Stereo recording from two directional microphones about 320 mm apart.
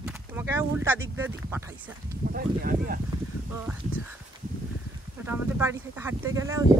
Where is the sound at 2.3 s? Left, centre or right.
Right.